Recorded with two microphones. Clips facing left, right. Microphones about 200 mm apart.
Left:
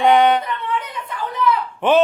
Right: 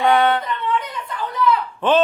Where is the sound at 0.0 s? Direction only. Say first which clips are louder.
Left 3 dB; 15° left (ahead or behind).